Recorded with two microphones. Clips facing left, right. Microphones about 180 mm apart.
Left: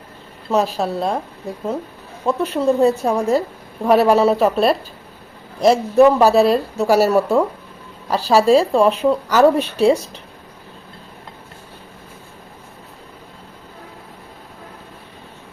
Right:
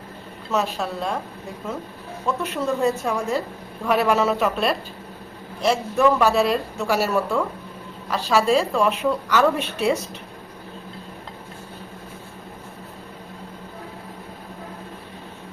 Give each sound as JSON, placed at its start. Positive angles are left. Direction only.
{"t": 0.5, "sound": "speech", "side_deg": 35}
{"t": 2.2, "sound": "speech", "side_deg": 35}